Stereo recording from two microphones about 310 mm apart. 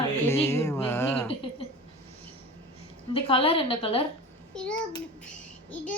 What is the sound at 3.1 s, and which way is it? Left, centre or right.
Speech, centre.